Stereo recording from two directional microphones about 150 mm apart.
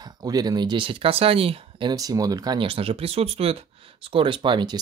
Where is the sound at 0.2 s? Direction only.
25° right (ahead or behind).